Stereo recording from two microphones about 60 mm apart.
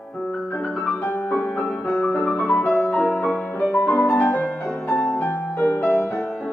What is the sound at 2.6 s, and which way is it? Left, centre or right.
Music, centre.